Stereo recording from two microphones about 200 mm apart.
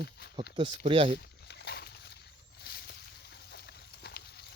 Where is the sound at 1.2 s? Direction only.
55° left (ahead or behind).